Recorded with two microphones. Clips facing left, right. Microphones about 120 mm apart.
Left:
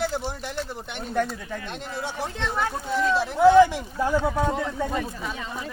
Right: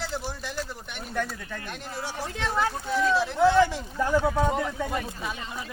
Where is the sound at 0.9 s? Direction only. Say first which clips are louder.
Left 6 dB; 25° left (ahead or behind).